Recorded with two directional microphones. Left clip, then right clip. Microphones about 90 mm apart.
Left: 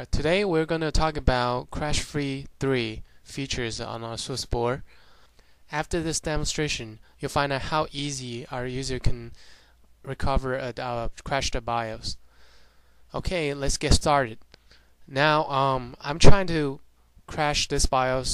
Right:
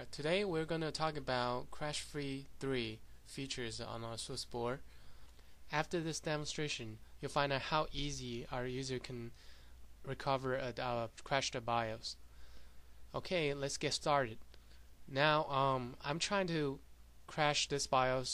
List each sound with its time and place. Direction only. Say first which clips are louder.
0.0 s speech: left 12 dB; 45° left (ahead or behind)
5.7 s speech: left 10 dB; 35° left (ahead or behind)